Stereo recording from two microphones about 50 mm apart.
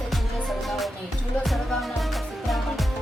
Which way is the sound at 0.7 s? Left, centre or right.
Centre.